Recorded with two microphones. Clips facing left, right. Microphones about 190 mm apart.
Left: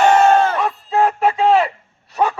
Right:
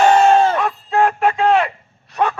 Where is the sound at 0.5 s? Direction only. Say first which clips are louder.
Even; 5° left (ahead or behind).